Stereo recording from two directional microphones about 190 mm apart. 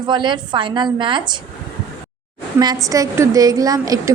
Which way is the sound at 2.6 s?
20° right (ahead or behind).